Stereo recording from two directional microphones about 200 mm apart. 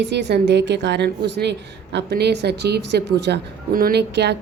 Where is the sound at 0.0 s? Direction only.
60° right (ahead or behind).